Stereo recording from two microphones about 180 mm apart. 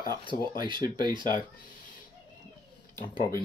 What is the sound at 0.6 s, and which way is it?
Speech, 25° right (ahead or behind).